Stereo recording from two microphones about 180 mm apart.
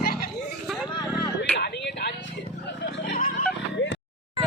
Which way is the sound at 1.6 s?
70° left (ahead or behind).